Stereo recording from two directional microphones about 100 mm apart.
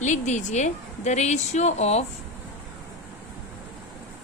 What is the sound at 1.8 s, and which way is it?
Speech, 90° left.